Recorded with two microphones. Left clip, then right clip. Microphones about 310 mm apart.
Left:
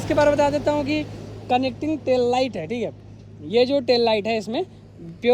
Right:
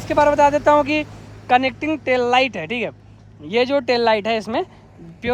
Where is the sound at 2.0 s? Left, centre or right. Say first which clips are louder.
Right 3 dB; right.